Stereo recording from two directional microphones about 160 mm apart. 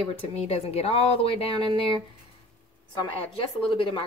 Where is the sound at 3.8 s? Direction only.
30° left (ahead or behind).